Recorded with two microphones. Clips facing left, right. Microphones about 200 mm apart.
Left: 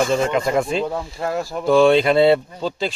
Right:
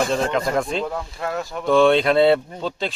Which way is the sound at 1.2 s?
30° left (ahead or behind).